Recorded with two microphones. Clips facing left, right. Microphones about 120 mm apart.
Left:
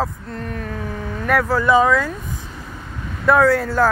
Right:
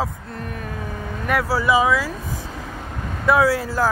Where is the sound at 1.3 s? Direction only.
5° right (ahead or behind).